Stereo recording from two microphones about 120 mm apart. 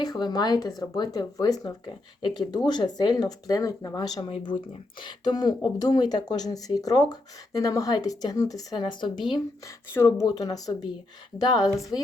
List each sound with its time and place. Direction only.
0.0 s speech: 35° left (ahead or behind)
11.6 s a woman's voice: centre (ahead or behind)